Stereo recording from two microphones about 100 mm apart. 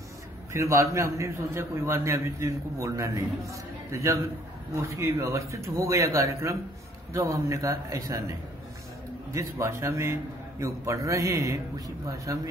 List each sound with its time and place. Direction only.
0.5 s a man's voice: 30° right (ahead or behind)
9.3 s a man's voice: 30° right (ahead or behind)